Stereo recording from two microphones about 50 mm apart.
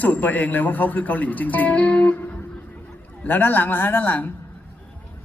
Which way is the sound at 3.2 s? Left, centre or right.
Left.